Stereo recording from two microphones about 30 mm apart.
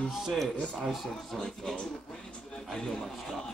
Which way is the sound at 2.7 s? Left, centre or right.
Centre.